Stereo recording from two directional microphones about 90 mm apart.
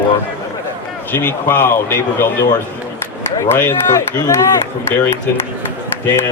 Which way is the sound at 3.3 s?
25° left (ahead or behind).